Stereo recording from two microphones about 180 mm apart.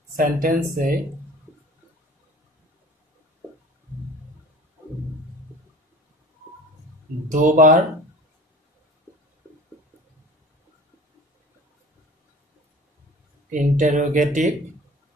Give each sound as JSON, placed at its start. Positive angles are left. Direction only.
{"t": 0.1, "sound": "speech", "side_deg": -50}
{"t": 7.2, "sound": "speech", "side_deg": -45}
{"t": 13.5, "sound": "speech", "side_deg": -45}